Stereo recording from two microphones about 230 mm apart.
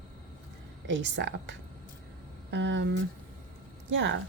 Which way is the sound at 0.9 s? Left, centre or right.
Right.